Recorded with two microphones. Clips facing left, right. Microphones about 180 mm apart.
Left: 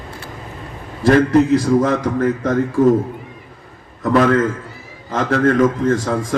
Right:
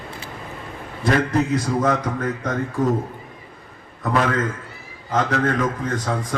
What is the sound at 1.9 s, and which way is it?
Speech, 45° left (ahead or behind).